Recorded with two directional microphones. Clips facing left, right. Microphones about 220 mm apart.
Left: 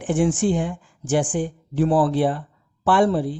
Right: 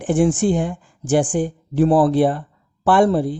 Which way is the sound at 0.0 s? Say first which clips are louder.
Right 3 dB; 40° right (ahead or behind).